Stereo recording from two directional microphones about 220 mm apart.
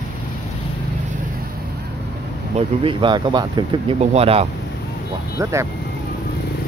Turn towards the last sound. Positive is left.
turn(degrees=-15)  # may be behind; listen again after turning